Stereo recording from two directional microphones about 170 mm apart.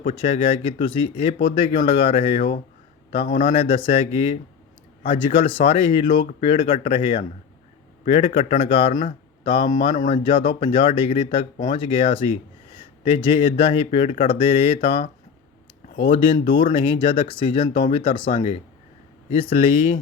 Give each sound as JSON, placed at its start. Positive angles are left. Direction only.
{"t": 0.0, "sound": "a man's voice", "side_deg": 30}
{"t": 8.9, "sound": "speech", "side_deg": 50}
{"t": 9.4, "sound": "speech", "side_deg": 30}